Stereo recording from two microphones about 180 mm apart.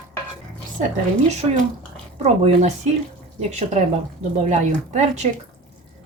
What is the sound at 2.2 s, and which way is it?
Speech, 40° right (ahead or behind).